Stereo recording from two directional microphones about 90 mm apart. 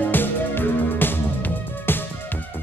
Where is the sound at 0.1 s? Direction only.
20° left (ahead or behind).